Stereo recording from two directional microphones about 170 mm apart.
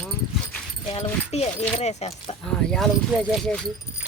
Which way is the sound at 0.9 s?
40° left (ahead or behind).